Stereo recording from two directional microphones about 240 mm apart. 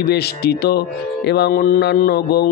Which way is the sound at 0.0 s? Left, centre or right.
Left.